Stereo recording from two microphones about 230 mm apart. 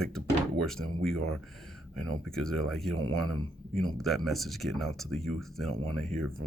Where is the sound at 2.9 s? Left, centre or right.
Right.